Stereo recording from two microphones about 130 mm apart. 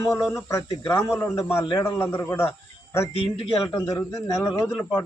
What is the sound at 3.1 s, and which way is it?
Speech, 45° left (ahead or behind).